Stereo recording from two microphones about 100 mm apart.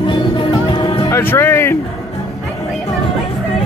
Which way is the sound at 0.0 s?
55° left (ahead or behind).